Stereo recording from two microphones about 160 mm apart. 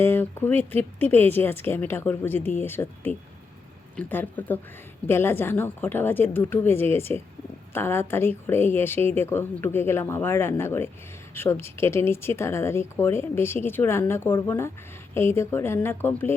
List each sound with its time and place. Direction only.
0.0 s a woman's voice: 15° left (ahead or behind)